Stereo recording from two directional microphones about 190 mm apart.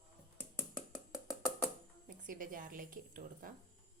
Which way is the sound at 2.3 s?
45° right (ahead or behind).